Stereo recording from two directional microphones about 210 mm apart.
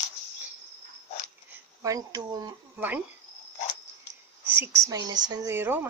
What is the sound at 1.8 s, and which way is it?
Speech, 15° right (ahead or behind).